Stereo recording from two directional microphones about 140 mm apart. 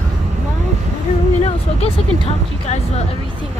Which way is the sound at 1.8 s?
45° left (ahead or behind).